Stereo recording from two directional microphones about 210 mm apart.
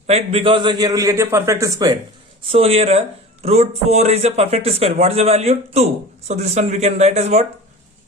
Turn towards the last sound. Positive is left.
turn(degrees=-30)  # may be behind; listen again after turning